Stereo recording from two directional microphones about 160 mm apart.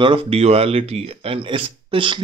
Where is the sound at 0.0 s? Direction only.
35° right (ahead or behind).